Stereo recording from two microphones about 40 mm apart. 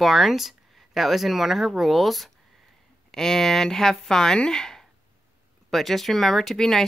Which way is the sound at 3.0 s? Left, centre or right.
Centre.